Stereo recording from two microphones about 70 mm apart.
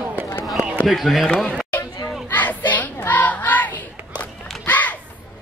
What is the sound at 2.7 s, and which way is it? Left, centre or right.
Child singing, left.